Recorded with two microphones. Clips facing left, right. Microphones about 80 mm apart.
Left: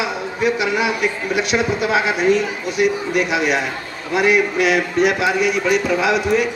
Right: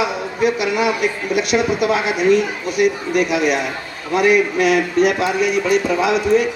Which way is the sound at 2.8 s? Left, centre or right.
Right.